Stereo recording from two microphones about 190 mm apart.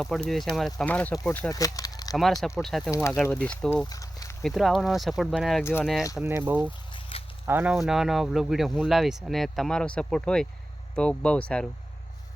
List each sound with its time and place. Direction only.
0.0 s speech: centre (ahead or behind); by 2.1 s 20° left (ahead or behind)
2.4 s speech: centre (ahead or behind)
3.8 s a sound: 20° left (ahead or behind)
4.4 s speech: centre (ahead or behind)
6.2 s speech: 10° right (ahead or behind)
7.1 s a sound: 30° left (ahead or behind)
7.4 s speech: 10° right (ahead or behind)